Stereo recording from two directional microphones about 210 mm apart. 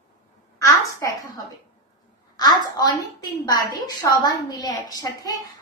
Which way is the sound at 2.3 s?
20° left (ahead or behind).